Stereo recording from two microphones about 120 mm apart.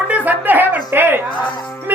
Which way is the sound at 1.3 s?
10° left (ahead or behind).